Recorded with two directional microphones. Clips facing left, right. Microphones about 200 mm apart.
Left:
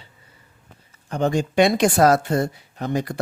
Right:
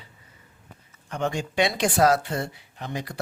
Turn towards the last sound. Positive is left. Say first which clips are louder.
# left 9 dB
turn(degrees=50)  # may be behind; listen again after turning